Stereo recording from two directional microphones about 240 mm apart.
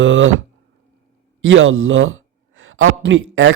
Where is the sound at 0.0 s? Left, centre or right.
Right.